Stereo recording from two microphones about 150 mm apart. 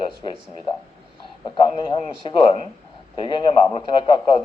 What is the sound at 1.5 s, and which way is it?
A man's voice, 35° left (ahead or behind).